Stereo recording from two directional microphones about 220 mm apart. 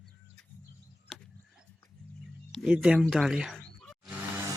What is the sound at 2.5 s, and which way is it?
Speech, centre (ahead or behind).